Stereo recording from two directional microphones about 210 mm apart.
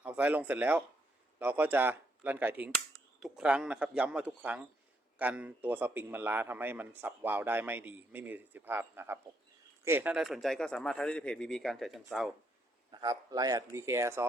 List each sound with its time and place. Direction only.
0.0 s a man's voice: 5° right (ahead or behind)
12.9 s a man's voice: 20° right (ahead or behind)